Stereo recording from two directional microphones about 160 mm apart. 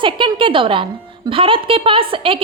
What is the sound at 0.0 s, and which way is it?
A woman's voice, 30° right (ahead or behind).